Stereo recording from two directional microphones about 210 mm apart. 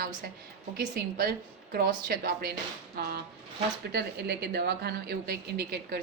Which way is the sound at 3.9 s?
50° right (ahead or behind).